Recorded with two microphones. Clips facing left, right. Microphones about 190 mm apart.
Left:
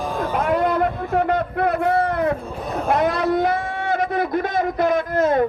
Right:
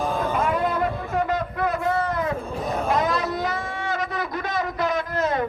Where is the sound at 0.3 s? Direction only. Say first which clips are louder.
Left 7 dB; 65° left (ahead or behind).